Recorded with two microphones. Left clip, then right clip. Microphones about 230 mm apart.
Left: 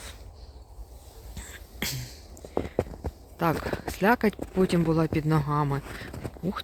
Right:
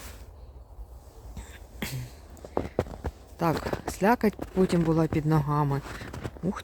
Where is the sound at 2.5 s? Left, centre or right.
Centre.